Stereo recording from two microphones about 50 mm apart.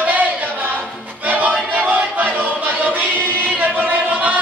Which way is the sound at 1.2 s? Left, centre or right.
Right.